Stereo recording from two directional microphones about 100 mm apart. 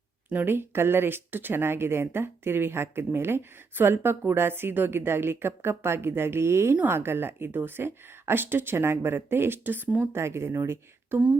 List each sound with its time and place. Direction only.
0.3 s speech: 20° right (ahead or behind)